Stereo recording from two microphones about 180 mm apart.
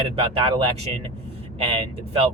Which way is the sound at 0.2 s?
30° right (ahead or behind).